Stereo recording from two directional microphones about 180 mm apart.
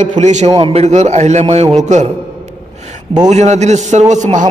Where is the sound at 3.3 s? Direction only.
40° right (ahead or behind).